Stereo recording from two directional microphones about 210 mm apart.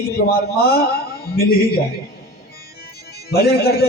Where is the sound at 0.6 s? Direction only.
45° left (ahead or behind).